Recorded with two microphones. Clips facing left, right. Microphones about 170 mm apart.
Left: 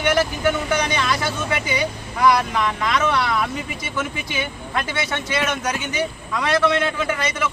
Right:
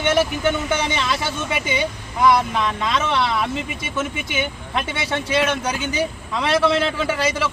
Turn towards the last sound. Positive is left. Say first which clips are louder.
# right 2 dB
turn(degrees=-30)  # may be behind; listen again after turning